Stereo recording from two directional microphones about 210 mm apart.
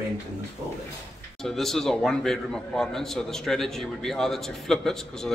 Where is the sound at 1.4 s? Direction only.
Centre (ahead or behind).